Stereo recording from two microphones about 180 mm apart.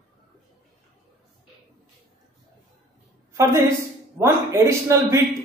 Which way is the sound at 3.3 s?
15° right (ahead or behind).